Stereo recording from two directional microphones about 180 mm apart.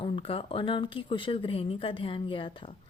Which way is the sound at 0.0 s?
30° left (ahead or behind).